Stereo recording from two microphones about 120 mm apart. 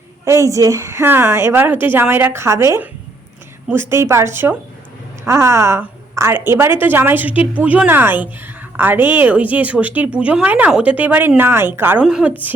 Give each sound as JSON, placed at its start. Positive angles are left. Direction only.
{"t": 0.3, "sound": "a woman's voice", "side_deg": -25}
{"t": 12.0, "sound": "a woman's voice", "side_deg": -5}